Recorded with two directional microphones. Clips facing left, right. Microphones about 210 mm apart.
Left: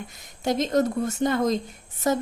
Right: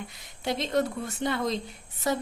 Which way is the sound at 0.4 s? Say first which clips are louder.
Left 5 dB; 45° left (ahead or behind).